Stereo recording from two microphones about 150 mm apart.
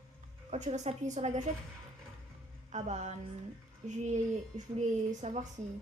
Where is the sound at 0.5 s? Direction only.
45° right (ahead or behind).